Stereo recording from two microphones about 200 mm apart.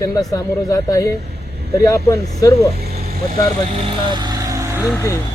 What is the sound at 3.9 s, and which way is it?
Vehicle, 20° right (ahead or behind).